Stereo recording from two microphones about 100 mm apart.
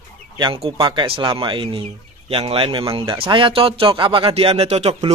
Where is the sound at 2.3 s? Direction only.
70° right (ahead or behind).